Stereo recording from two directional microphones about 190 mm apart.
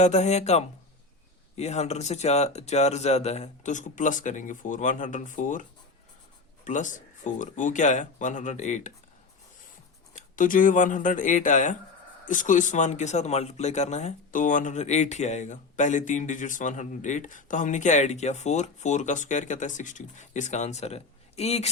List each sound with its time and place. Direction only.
0.0 s speech: 35° left (ahead or behind)
6.7 s speech: 40° left (ahead or behind)
10.2 s speech: 45° left (ahead or behind)